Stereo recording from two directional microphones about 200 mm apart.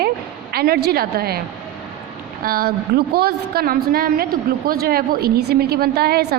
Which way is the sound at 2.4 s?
50° right (ahead or behind).